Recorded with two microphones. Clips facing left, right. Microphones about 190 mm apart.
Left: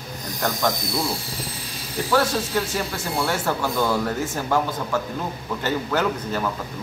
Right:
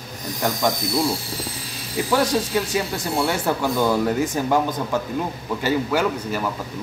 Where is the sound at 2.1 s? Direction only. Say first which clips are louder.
Right 1 dB; 15° right (ahead or behind).